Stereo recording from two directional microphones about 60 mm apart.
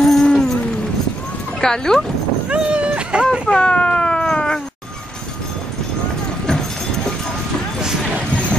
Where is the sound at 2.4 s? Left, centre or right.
Centre.